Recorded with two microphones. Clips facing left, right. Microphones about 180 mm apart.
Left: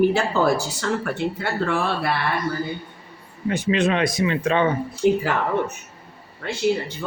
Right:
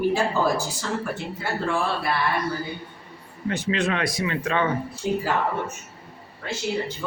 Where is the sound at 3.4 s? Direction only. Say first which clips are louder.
Left 4 dB; 15° left (ahead or behind).